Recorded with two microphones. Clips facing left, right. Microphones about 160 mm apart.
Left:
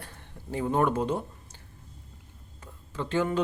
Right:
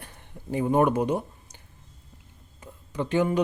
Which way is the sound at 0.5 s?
15° right (ahead or behind).